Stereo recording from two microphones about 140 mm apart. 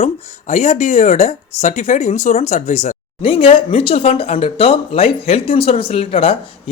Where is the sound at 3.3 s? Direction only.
40° left (ahead or behind).